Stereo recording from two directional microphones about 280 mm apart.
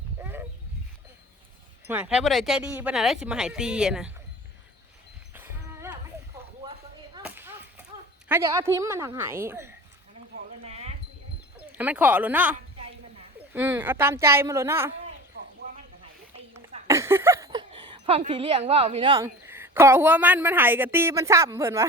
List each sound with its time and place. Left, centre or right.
0.2 s a sound: centre
1.9 s speech: centre
5.3 s dog: centre
7.3 s whip: centre
8.3 s a woman's voice: centre
10.6 s a sound: right
11.8 s a woman's voice: centre
16.6 s speech: centre